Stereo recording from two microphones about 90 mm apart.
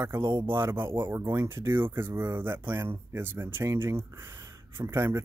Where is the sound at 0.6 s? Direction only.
30° right (ahead or behind).